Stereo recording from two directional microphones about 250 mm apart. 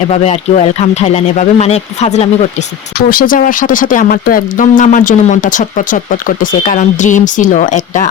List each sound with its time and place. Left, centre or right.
0.1 s speech: left